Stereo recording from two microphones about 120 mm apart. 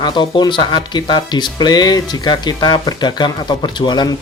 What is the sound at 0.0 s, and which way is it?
Speech, 40° left (ahead or behind).